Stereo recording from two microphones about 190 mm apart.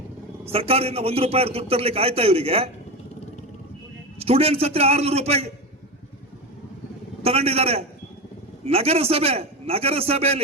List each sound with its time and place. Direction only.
0.5 s a man's voice: 30° right (ahead or behind)
4.2 s a man's voice: 30° right (ahead or behind)
7.2 s a man's voice: 30° right (ahead or behind)